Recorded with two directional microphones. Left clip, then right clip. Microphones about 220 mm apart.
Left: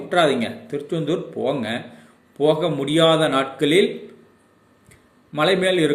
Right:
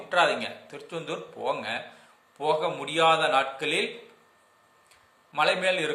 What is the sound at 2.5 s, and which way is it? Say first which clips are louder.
A man's voice: left 6 dB; 10° left (ahead or behind).